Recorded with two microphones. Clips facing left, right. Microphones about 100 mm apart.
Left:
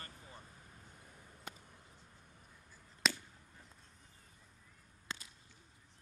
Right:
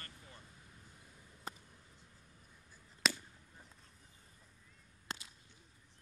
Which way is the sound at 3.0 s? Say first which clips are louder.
Even; centre (ahead or behind).